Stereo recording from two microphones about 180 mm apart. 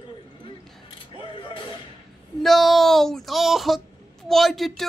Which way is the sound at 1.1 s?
30° left (ahead or behind).